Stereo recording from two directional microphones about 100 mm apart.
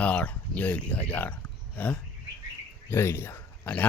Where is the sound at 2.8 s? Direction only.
25° left (ahead or behind).